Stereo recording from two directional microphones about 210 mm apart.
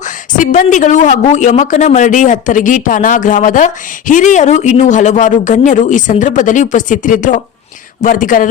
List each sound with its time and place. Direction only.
0.0 s a man's voice: 35° left (ahead or behind)